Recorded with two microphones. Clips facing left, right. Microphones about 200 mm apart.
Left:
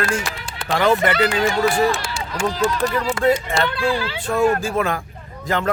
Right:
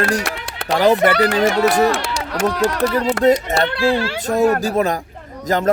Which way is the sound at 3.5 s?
65° right (ahead or behind).